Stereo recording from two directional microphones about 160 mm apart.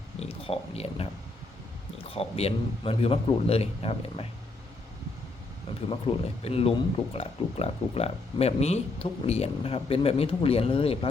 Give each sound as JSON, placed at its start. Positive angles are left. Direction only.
{"t": 0.2, "sound": "speech", "side_deg": 40}
{"t": 2.0, "sound": "speech", "side_deg": 40}
{"t": 5.9, "sound": "speech", "side_deg": 35}